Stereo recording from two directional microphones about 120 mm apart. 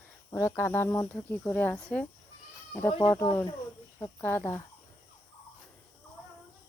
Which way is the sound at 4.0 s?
15° left (ahead or behind).